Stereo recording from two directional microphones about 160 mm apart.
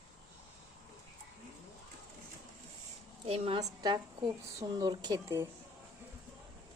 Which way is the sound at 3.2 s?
40° right (ahead or behind).